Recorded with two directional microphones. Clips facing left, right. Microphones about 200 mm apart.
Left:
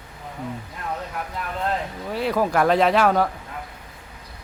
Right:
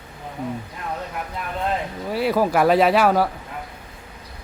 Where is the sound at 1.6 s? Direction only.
10° right (ahead or behind).